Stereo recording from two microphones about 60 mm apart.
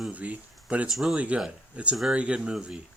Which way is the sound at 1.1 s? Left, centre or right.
Right.